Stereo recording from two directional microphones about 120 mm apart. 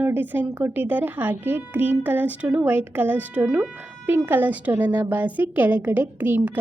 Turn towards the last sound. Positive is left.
turn(degrees=-15)  # may be behind; listen again after turning